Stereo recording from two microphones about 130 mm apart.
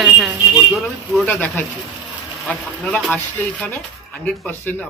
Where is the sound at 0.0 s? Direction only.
5° right (ahead or behind).